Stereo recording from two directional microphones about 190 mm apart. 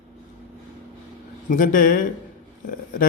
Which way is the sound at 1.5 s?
45° left (ahead or behind).